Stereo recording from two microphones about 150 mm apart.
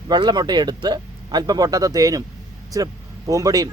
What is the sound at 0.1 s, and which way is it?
Speech, 30° right (ahead or behind).